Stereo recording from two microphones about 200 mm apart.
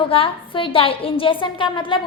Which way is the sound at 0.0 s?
25° left (ahead or behind).